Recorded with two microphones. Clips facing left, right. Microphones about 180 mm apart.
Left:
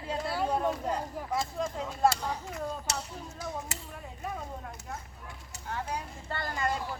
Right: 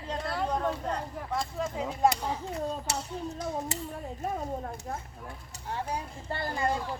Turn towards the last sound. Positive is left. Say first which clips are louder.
# right 2 dB
turn(degrees=-30)  # may be behind; listen again after turning